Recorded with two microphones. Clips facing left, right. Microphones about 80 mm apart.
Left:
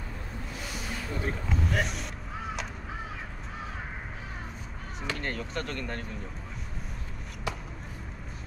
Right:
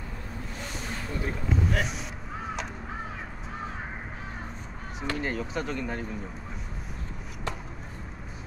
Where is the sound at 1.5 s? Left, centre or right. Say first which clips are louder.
Right 2 dB; centre.